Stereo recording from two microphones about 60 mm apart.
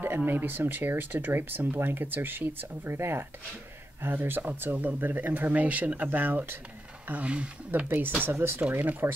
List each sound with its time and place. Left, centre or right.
0.0 s speech: right
7.1 s speech: right
8.5 s speech: right